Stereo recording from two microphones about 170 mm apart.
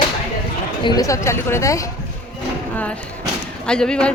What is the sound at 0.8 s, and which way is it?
A woman's voice, 20° left (ahead or behind).